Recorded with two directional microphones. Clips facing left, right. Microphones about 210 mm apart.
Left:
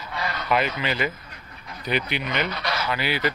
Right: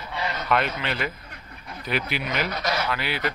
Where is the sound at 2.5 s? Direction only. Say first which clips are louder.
Right 2 dB; 45° right (ahead or behind).